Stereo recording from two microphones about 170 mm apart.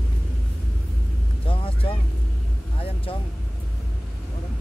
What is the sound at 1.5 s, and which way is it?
Vehicle, 30° left (ahead or behind).